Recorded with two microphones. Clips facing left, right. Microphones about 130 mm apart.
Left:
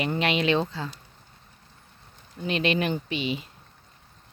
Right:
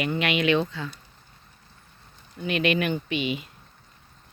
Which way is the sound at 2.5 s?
30° left (ahead or behind).